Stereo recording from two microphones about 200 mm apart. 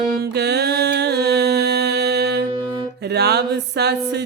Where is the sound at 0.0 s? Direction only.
55° right (ahead or behind).